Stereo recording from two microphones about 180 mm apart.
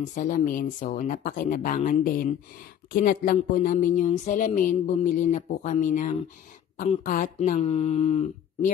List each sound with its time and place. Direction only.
0.0 s a woman's voice: 45° left (ahead or behind)